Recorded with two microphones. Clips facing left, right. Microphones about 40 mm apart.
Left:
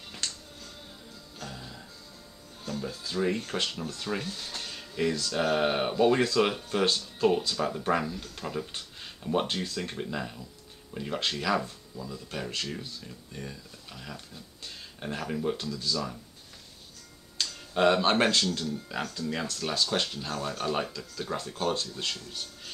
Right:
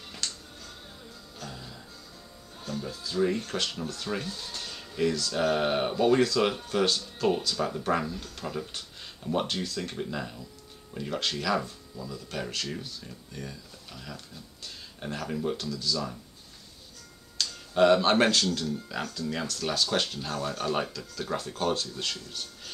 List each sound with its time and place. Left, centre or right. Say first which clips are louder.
0.2 s music: even; left
1.4 s music: even; centre
2.7 s speech: even; centre
4.4 s music: even; centre
5.3 s speech: left 2 dB; centre
17.4 s speech: right 3 dB; centre